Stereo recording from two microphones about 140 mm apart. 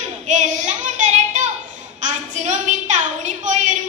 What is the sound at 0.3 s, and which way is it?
Child singing, 60° right (ahead or behind).